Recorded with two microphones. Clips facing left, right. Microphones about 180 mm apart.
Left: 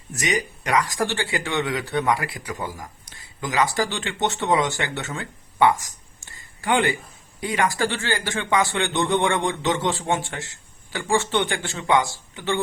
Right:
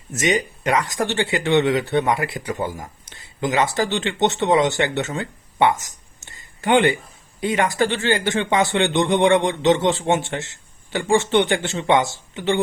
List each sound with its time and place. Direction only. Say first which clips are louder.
0.1 s speech: right 5 dB; 25° right (ahead or behind)